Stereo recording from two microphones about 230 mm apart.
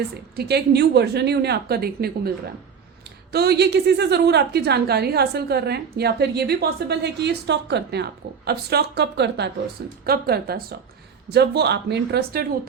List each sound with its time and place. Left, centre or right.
0.3 s a woman's voice: right
3.3 s a woman's voice: right